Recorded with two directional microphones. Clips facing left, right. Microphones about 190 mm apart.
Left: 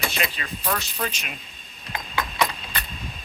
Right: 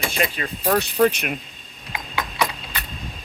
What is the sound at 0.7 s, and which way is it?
Speech, 60° right (ahead or behind).